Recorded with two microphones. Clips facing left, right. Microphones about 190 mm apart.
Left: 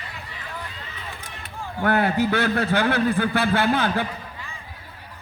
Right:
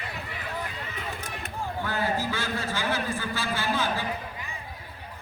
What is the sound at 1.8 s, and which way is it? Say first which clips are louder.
A man's voice: left 10 dB; 65° left (ahead or behind).